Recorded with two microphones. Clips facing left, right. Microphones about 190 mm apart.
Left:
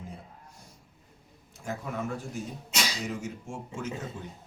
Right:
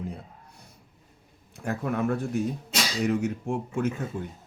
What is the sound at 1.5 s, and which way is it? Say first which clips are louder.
Speech: right 6 dB; 60° right (ahead or behind).